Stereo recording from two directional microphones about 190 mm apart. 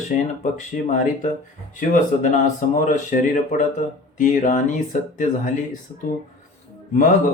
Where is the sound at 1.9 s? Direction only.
40° left (ahead or behind).